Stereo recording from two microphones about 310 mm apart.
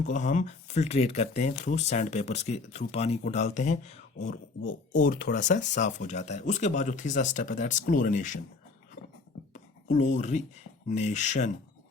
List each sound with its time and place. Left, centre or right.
0.1 s speech: left
9.9 s speech: left